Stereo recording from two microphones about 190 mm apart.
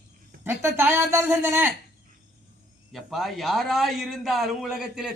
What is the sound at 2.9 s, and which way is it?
A man's voice, centre (ahead or behind).